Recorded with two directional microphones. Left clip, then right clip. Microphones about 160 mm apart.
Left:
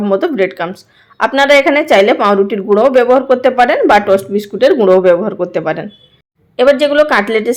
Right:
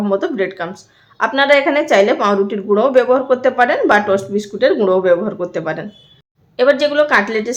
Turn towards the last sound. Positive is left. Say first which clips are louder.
# left 3 dB
turn(degrees=30)  # may be behind; listen again after turning